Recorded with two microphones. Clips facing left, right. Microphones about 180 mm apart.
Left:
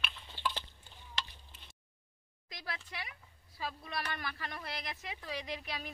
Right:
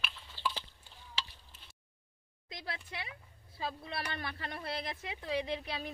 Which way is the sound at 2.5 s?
25° right (ahead or behind).